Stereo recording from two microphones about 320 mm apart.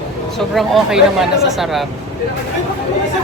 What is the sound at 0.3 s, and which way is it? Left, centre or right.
Speech, centre.